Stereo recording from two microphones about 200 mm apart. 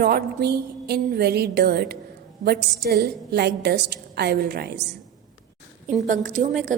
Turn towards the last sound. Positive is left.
turn(degrees=-40)  # may be behind; listen again after turning